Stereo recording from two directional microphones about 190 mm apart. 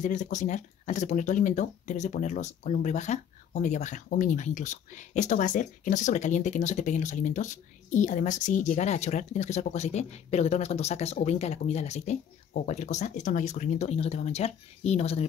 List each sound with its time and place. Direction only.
0.0 s speech: 40° left (ahead or behind)